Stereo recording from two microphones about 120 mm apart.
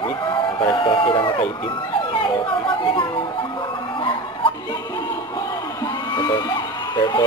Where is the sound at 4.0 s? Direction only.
45° left (ahead or behind).